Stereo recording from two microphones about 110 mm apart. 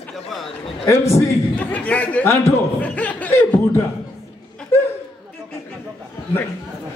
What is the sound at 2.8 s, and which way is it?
Chuckle, 15° left (ahead or behind).